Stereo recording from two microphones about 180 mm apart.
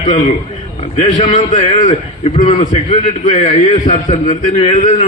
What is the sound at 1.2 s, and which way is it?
A man's voice, 40° left (ahead or behind).